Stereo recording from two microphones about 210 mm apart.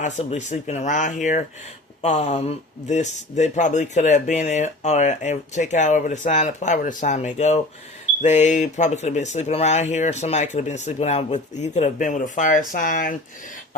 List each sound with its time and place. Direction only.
0.0 s speech: 35° left (ahead or behind)